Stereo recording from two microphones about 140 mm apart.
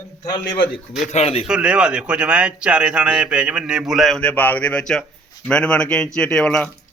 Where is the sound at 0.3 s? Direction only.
30° left (ahead or behind).